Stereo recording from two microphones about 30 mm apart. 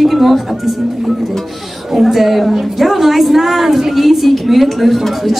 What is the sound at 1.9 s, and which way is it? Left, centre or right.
A woman's voice, centre.